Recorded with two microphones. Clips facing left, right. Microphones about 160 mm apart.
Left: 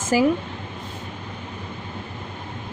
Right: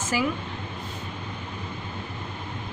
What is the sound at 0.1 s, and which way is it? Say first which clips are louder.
Speech: left 8 dB; 40° left (ahead or behind).